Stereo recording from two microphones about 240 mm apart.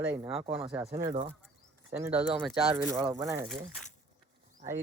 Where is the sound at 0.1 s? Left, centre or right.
Right.